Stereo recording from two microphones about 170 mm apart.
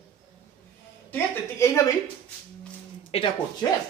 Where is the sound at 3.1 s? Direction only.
30° left (ahead or behind).